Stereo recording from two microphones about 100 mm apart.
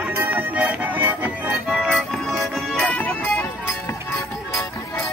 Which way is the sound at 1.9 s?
5° left (ahead or behind).